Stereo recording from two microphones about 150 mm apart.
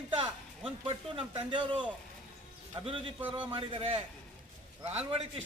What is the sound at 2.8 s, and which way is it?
A man's voice, 40° right (ahead or behind).